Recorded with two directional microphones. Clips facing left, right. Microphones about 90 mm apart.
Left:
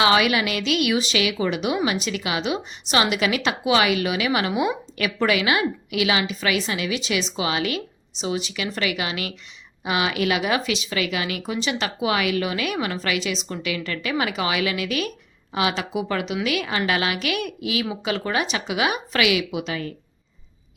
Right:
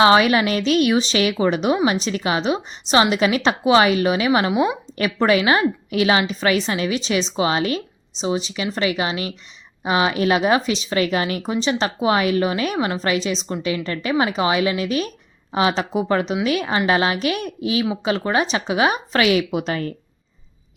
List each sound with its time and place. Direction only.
0.0 s a woman's voice: 35° right (ahead or behind)